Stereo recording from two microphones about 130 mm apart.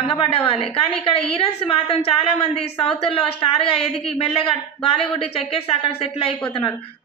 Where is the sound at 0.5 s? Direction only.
45° left (ahead or behind).